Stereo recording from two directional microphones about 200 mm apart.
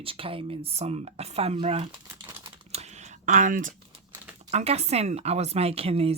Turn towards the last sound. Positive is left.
turn(degrees=-30)  # may be behind; listen again after turning